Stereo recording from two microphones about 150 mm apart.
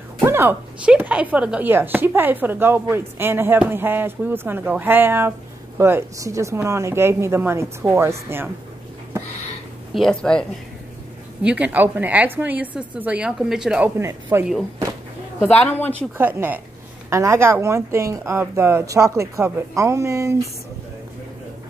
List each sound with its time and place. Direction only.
0.2 s speech: 15° right (ahead or behind)
9.9 s speech: 5° left (ahead or behind)
11.4 s speech: 10° right (ahead or behind)
15.4 s speech: 10° left (ahead or behind)
16.2 s speech: 10° right (ahead or behind)